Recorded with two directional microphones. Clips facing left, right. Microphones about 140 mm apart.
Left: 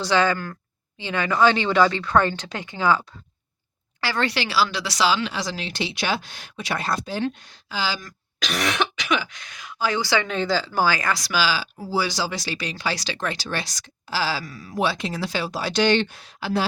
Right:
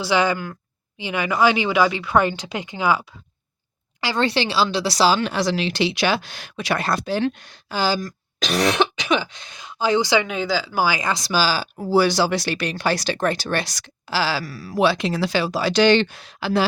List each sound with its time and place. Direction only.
0.0 s speech: 10° right (ahead or behind)
4.0 s speech: 20° right (ahead or behind); by 8.1 s 45° right (ahead or behind)
8.4 s speech: 25° right (ahead or behind); by 16.6 s 90° right